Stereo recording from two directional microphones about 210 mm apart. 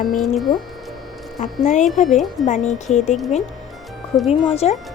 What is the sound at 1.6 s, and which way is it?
Speech, 35° left (ahead or behind).